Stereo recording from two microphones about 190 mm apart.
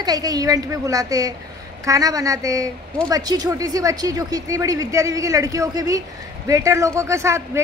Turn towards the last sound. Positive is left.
turn(degrees=-15)  # may be behind; listen again after turning